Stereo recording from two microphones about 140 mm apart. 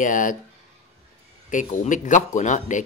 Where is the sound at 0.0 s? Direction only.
70° left (ahead or behind).